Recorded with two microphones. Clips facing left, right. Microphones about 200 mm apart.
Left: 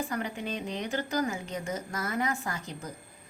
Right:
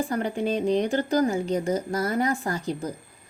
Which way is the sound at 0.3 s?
35° right (ahead or behind).